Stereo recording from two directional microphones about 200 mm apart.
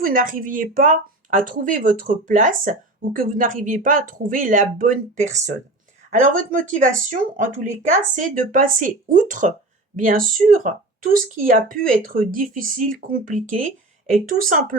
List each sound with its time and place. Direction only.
0.0 s speech: 45° right (ahead or behind)